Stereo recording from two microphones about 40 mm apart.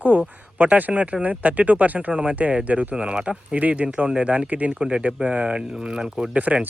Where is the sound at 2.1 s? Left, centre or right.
Right.